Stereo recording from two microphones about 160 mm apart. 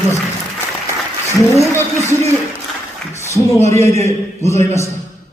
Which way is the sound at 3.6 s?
20° left (ahead or behind).